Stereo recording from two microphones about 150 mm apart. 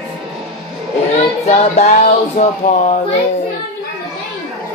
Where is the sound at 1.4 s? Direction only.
45° left (ahead or behind).